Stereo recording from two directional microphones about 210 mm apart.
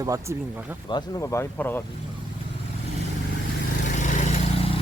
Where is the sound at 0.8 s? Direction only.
20° left (ahead or behind).